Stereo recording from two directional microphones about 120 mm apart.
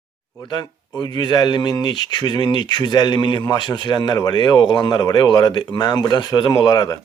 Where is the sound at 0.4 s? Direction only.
35° left (ahead or behind).